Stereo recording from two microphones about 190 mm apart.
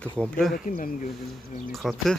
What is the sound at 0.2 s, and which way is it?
Speech, centre (ahead or behind).